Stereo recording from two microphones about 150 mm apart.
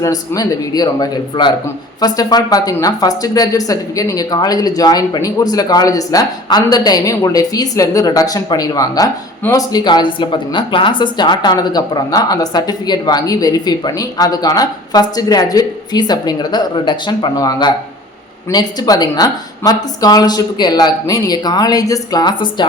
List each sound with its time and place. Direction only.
0.0 s speech: 20° left (ahead or behind)